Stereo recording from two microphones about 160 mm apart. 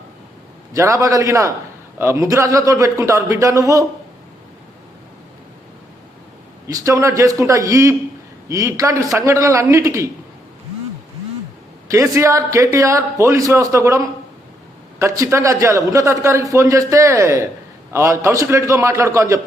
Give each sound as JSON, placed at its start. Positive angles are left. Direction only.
{"t": 0.7, "sound": "a man's voice", "side_deg": -20}
{"t": 6.7, "sound": "a man's voice", "side_deg": -20}
{"t": 12.1, "sound": "a man's voice", "side_deg": -20}
{"t": 15.0, "sound": "a man's voice", "side_deg": -20}